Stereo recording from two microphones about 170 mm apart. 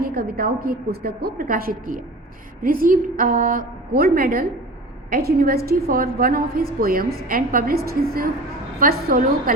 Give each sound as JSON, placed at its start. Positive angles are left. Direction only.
{"t": 0.0, "sound": "a woman's voice", "side_deg": -65}